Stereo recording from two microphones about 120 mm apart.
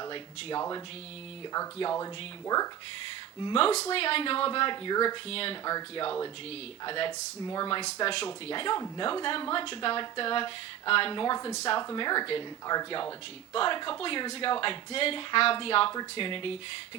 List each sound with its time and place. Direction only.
0.0 s speech: 40° left (ahead or behind)
3.4 s speech: 50° left (ahead or behind)
5.3 s speech: 50° left (ahead or behind)
5.6 s speech: 40° left (ahead or behind)
7.4 s speech: 35° left (ahead or behind)